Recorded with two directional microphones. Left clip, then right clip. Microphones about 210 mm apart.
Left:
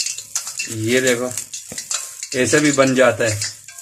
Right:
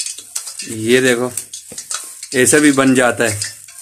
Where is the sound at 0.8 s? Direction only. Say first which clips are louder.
Right 4 dB; 50° right (ahead or behind).